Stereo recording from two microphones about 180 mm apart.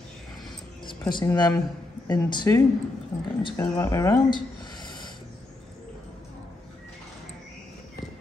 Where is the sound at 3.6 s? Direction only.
20° left (ahead or behind).